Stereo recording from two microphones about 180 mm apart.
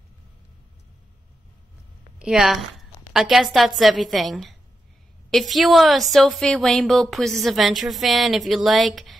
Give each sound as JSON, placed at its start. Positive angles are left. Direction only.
{"t": 2.1, "sound": "a woman's voice", "side_deg": -5}